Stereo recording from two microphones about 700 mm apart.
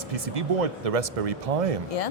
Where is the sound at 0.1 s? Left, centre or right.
Right.